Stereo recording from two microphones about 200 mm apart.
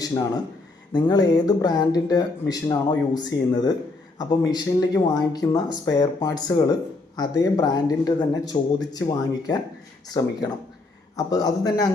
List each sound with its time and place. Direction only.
0.0 s speech: 15° left (ahead or behind)